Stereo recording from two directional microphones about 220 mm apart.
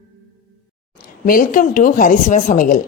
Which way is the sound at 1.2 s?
40° left (ahead or behind).